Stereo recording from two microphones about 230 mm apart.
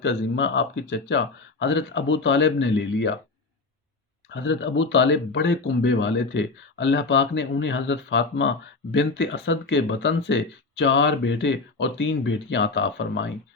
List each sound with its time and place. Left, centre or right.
0.0 s speech: left
4.4 s speech: left